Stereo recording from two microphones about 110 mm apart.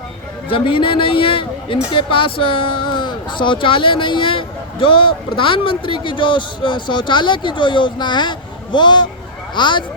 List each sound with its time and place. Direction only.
0.4 s a man's voice: 50° left (ahead or behind)